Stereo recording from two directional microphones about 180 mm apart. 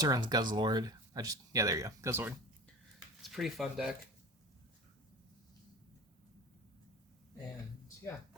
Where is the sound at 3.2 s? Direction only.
Centre (ahead or behind).